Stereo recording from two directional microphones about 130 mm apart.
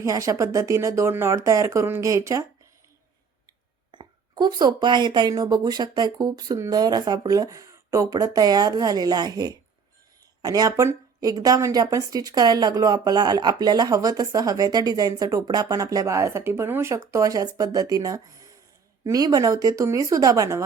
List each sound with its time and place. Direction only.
0.0 s a woman's voice: 25° right (ahead or behind)
3.9 s a woman's voice: 35° right (ahead or behind)